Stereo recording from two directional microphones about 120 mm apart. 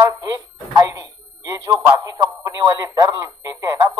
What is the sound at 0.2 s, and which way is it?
A man's voice, 30° right (ahead or behind).